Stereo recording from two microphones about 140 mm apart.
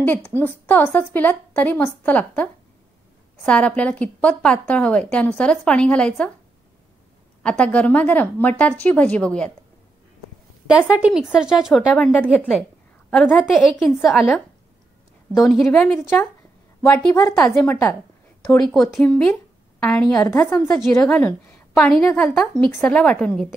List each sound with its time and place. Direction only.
0.0 s a woman's voice: 10° left (ahead or behind)
7.4 s a woman's voice: 10° left (ahead or behind)
10.7 s speech: 10° right (ahead or behind)
11.9 s a woman's voice: 10° left (ahead or behind)
15.3 s a woman's voice: centre (ahead or behind)
17.2 s a woman's voice: 10° left (ahead or behind)
18.7 s a woman's voice: 5° left (ahead or behind)
21.7 s a woman's voice: 5° left (ahead or behind)